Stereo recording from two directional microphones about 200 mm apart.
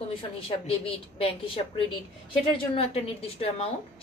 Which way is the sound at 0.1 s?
25° left (ahead or behind).